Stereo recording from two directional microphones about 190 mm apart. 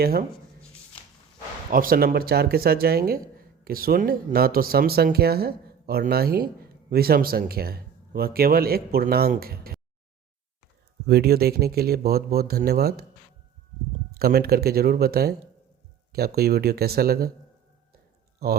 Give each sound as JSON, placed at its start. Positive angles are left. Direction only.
{"t": 0.0, "sound": "speech", "side_deg": -50}
{"t": 1.7, "sound": "speech", "side_deg": -50}
{"t": 11.0, "sound": "speech", "side_deg": -55}
{"t": 14.1, "sound": "speech", "side_deg": -55}
{"t": 18.4, "sound": "speech", "side_deg": -55}